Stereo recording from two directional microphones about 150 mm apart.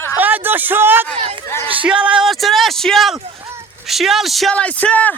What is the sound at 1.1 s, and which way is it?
Speech, 40° right (ahead or behind).